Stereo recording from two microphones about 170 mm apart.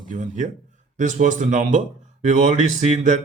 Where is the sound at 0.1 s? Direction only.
50° right (ahead or behind).